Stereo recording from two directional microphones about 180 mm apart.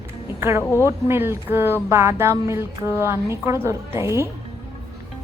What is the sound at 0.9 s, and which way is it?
Speech, 15° right (ahead or behind).